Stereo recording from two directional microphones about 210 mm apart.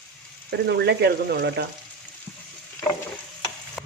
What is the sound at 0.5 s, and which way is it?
Speech, 55° right (ahead or behind).